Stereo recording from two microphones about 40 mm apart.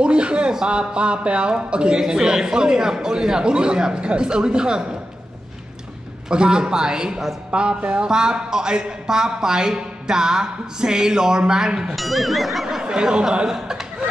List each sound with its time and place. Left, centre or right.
0.0 s a man's voice: right
6.2 s a man's voice: right
8.1 s a woman's voice: centre
11.9 s speech: centre
12.8 s a man's voice: right
13.5 s a woman's voice: centre